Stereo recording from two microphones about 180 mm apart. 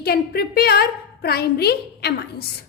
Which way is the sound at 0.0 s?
60° left (ahead or behind).